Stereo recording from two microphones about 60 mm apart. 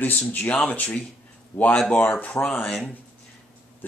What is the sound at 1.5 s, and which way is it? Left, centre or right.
Speech, left.